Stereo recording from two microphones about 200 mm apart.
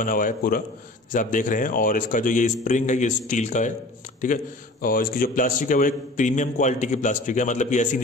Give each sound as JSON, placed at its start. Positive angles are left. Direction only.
{"t": 0.0, "sound": "a man's voice", "side_deg": 45}
{"t": 4.8, "sound": "a man's voice", "side_deg": 45}